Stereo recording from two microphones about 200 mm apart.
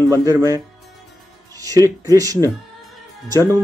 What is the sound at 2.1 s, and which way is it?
Speech, 15° right (ahead or behind).